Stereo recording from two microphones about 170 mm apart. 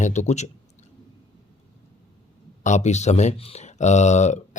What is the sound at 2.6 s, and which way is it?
Speech, 45° left (ahead or behind).